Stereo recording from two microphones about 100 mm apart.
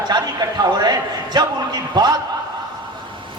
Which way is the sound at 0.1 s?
45° right (ahead or behind).